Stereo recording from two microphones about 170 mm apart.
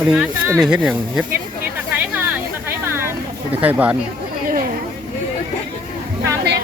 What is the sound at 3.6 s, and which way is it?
Speech, 10° right (ahead or behind).